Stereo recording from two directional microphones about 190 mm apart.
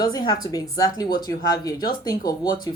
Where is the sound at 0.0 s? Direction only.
20° left (ahead or behind).